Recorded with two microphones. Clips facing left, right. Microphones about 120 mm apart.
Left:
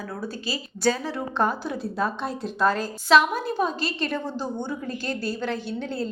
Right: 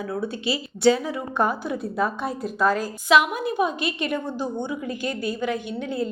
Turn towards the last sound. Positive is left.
turn(degrees=-15)  # may be behind; listen again after turning